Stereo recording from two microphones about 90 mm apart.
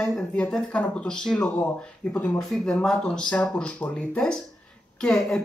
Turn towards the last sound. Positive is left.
turn(degrees=5)  # may be behind; listen again after turning